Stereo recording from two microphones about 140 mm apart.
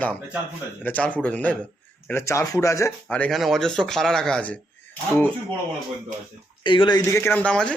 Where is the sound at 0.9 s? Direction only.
10° left (ahead or behind).